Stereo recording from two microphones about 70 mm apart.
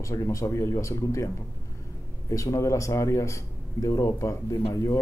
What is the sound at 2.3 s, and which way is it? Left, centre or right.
A man's voice, left.